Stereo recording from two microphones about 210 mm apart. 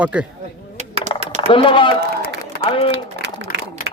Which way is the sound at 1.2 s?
30° right (ahead or behind).